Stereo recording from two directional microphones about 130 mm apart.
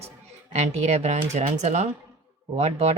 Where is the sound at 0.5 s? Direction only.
55° right (ahead or behind).